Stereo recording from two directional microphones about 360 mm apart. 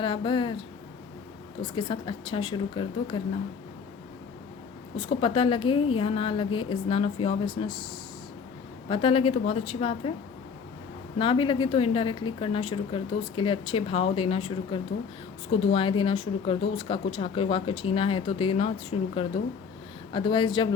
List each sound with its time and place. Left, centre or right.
0.0 s speech: centre
1.7 s a woman's voice: centre
4.9 s a woman's voice: centre
8.9 s a woman's voice: centre
11.2 s a woman's voice: centre